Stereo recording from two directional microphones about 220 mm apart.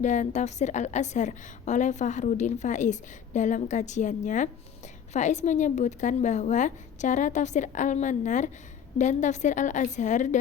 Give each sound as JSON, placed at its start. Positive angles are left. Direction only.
{"t": 0.0, "sound": "a woman's voice", "side_deg": 30}